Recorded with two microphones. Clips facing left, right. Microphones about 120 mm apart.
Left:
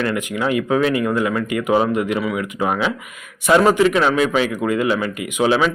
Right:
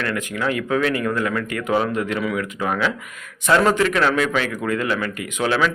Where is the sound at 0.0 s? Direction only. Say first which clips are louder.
Left 3 dB; 15° left (ahead or behind).